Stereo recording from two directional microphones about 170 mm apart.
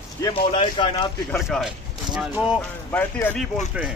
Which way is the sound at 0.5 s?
30° left (ahead or behind).